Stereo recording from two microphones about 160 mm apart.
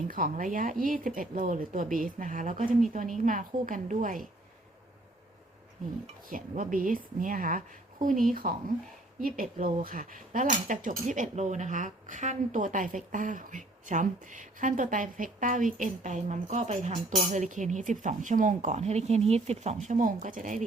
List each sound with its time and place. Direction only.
0.1 s speech: 60° right (ahead or behind)
6.2 s speech: 55° right (ahead or behind)